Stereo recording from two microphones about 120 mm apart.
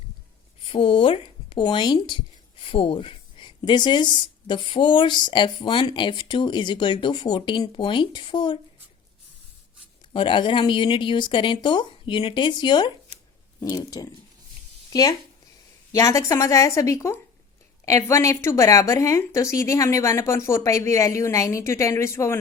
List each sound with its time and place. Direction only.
0.6 s speech: 45° left (ahead or behind)
10.1 s speech: 45° left (ahead or behind)
15.9 s speech: 25° left (ahead or behind)